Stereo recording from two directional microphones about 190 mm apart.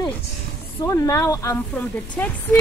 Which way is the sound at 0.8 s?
15° left (ahead or behind).